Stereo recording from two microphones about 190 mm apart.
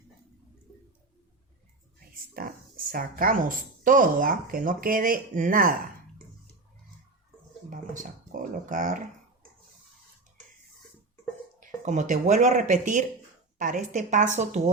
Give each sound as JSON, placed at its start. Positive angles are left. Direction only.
{"t": 2.3, "sound": "speech", "side_deg": -50}
{"t": 8.3, "sound": "a sound", "side_deg": -45}
{"t": 11.6, "sound": "speech", "side_deg": -40}